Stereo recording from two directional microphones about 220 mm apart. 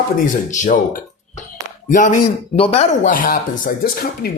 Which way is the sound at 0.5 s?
35° left (ahead or behind).